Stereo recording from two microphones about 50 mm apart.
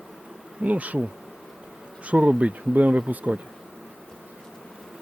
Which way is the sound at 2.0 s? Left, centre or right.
Right.